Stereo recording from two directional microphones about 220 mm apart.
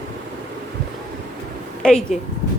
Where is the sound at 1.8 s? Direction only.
Centre (ahead or behind).